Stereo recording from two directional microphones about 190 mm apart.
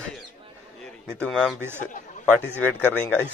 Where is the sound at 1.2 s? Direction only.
Centre (ahead or behind).